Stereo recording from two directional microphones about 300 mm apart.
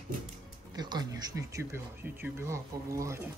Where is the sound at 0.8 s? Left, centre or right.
Centre.